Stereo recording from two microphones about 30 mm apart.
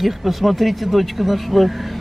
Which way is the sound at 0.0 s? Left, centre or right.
Centre.